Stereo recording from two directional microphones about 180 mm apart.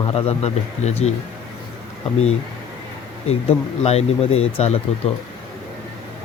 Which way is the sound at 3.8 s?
35° left (ahead or behind).